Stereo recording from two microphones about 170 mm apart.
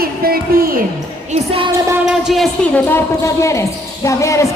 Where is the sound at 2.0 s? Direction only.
Centre (ahead or behind).